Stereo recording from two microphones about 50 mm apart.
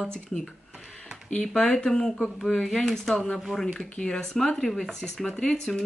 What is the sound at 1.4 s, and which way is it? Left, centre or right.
Speech, centre.